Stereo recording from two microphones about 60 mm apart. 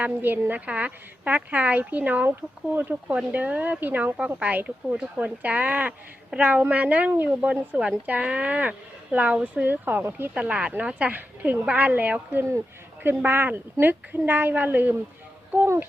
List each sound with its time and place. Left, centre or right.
0.0 s a woman's voice: right
0.6 s speech: right
9.6 s a woman's voice: right
10.3 s speech: right
12.4 s speech: right
13.0 s a woman's voice: right